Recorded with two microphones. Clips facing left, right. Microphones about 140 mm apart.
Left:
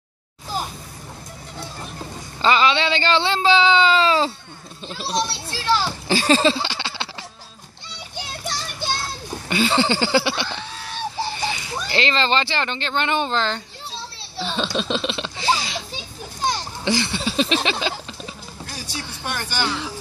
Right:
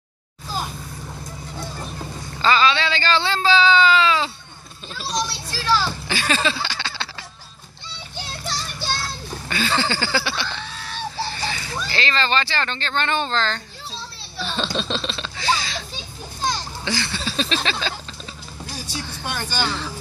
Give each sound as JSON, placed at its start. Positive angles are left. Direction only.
{"t": 2.4, "sound": "a sound", "side_deg": 20}
{"t": 4.8, "sound": "children playing", "side_deg": 25}
{"t": 8.8, "sound": "children playing", "side_deg": 20}
{"t": 11.1, "sound": "a child's voice", "side_deg": 15}
{"t": 14.5, "sound": "laughter", "side_deg": 10}
{"t": 16.4, "sound": "a child's voice", "side_deg": 20}
{"t": 19.5, "sound": "speech", "side_deg": 15}